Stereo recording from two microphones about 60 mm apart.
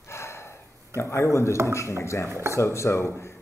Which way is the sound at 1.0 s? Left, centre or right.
Left.